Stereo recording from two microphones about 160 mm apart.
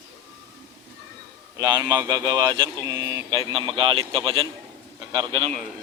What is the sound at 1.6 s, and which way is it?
A man's voice, 25° right (ahead or behind).